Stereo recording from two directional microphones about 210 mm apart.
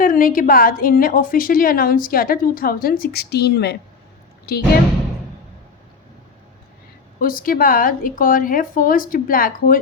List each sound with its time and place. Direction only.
0.0 s a woman's voice: 40° left (ahead or behind)
7.2 s a woman's voice: 45° left (ahead or behind)